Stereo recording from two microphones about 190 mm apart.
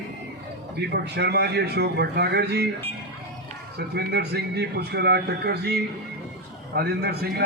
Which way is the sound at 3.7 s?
60° right (ahead or behind).